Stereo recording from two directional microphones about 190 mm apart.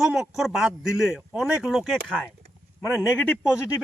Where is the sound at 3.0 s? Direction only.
10° left (ahead or behind).